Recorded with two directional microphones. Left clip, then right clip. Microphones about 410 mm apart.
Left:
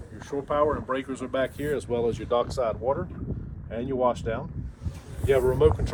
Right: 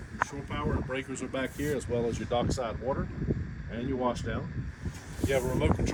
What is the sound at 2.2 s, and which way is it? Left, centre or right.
Speech, centre.